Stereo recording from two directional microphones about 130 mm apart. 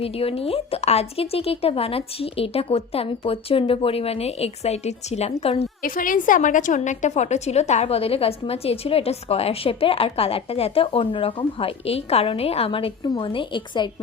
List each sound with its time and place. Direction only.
0.0 s a woman's voice: 50° left (ahead or behind)
5.8 s a woman's voice: 90° left; by 13.9 s 35° left (ahead or behind)